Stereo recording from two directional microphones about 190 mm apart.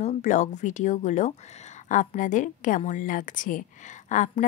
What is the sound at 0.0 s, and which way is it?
A woman's voice, 40° left (ahead or behind).